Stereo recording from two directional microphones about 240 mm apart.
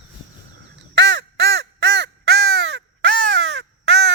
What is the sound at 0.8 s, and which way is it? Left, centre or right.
Crow, right.